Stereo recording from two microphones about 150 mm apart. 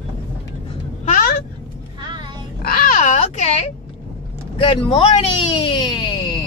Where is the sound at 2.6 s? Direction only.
75° left (ahead or behind); by 3.7 s 45° left (ahead or behind).